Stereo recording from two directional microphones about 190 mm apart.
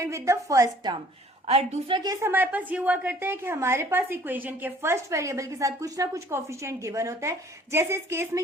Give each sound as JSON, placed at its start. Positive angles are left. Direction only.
{"t": 0.0, "sound": "a woman's voice", "side_deg": -15}
{"t": 1.5, "sound": "a woman's voice", "side_deg": -35}
{"t": 2.0, "sound": "a woman's voice", "side_deg": -10}